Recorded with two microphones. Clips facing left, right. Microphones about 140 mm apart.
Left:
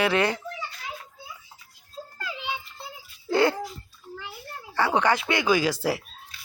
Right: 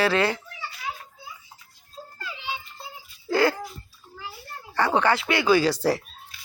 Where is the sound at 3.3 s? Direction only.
25° left (ahead or behind).